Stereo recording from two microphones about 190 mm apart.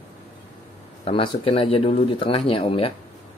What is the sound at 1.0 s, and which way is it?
Speech, 30° left (ahead or behind).